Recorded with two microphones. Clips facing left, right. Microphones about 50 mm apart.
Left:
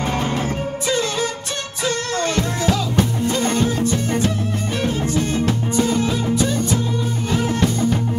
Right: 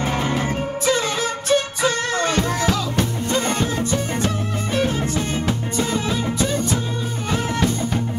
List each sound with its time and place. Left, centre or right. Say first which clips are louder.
0.0 s music: even; centre
2.1 s music: right 1 dB; centre
2.7 s music: left 2 dB; centre
3.3 s music: left 1 dB; centre